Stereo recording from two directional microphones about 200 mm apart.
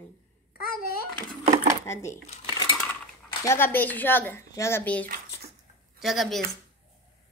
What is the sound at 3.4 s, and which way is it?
Speech, 10° left (ahead or behind).